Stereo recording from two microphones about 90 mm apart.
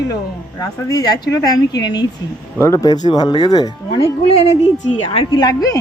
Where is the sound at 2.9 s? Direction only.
50° left (ahead or behind).